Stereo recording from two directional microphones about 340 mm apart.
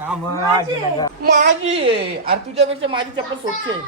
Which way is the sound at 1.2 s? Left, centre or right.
Right.